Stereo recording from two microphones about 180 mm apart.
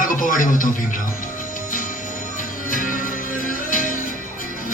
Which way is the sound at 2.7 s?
50° left (ahead or behind).